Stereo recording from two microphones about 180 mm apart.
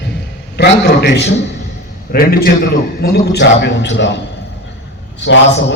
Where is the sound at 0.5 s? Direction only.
70° left (ahead or behind).